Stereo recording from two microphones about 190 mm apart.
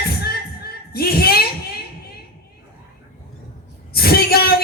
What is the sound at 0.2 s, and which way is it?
Music, 55° left (ahead or behind).